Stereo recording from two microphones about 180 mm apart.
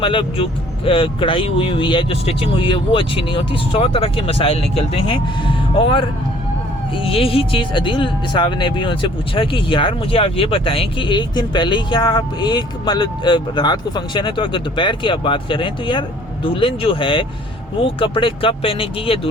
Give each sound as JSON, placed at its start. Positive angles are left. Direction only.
{"t": 0.0, "sound": "speech", "side_deg": 30}